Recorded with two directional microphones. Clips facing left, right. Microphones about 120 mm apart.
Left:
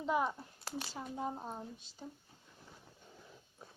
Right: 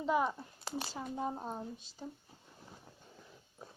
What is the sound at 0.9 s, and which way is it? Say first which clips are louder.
Speech: right 1 dB; 5° right (ahead or behind).